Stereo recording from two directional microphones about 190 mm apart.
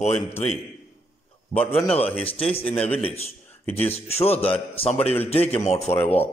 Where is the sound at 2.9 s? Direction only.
30° left (ahead or behind).